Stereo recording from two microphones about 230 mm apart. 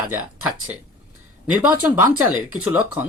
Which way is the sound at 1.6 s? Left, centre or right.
Centre.